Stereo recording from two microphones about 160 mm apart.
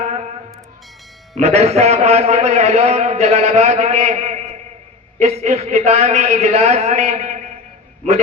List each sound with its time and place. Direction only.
1.4 s a man's voice: 40° right (ahead or behind)